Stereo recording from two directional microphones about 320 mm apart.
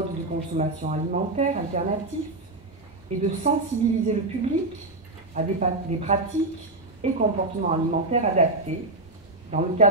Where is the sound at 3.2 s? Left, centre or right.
Right.